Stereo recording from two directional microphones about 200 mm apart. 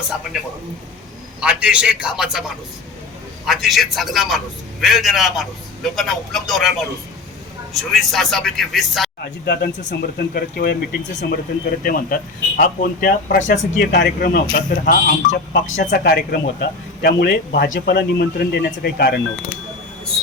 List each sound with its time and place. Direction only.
1.4 s a man's voice: 5° right (ahead or behind)
3.4 s a man's voice: centre (ahead or behind)
9.2 s speech: 55° left (ahead or behind)